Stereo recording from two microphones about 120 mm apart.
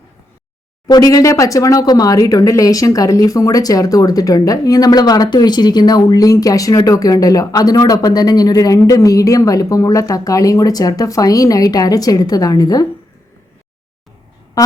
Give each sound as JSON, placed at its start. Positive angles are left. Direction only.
{"t": 0.9, "sound": "speech", "side_deg": 30}